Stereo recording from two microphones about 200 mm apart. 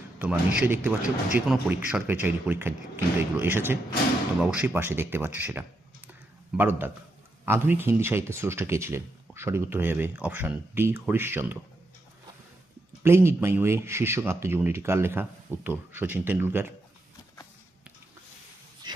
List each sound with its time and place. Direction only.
0.2 s speech: 10° right (ahead or behind)
13.0 s speech: 10° right (ahead or behind)
18.8 s dog: 20° right (ahead or behind)